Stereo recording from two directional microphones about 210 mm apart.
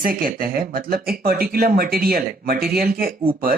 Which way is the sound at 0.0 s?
40° right (ahead or behind).